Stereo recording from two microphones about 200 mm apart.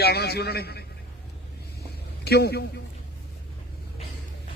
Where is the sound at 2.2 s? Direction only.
55° left (ahead or behind).